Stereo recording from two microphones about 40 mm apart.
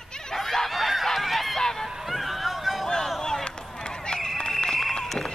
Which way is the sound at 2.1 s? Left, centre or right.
Centre.